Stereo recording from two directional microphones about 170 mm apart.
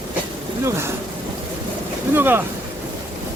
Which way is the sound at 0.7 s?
15° right (ahead or behind).